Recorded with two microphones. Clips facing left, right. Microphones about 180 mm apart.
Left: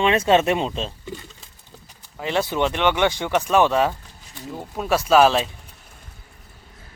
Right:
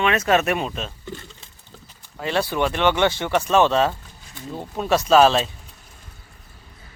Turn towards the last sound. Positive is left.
turn(degrees=10)  # may be behind; listen again after turning